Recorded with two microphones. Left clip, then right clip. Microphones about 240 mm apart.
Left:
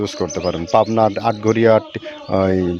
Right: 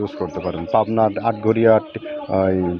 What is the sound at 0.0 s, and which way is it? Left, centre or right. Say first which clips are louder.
Speech: left 3 dB; left.